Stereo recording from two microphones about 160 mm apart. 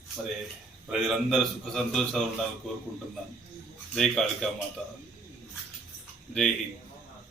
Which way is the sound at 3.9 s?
Centre (ahead or behind).